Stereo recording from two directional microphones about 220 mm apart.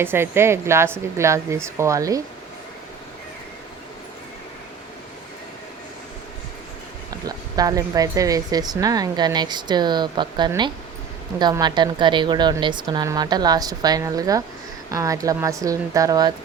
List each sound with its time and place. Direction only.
0.0 s speech: 10° right (ahead or behind)
7.3 s a woman's voice: 15° right (ahead or behind)